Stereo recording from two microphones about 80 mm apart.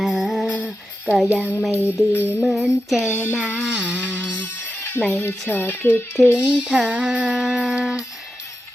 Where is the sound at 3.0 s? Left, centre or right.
Left.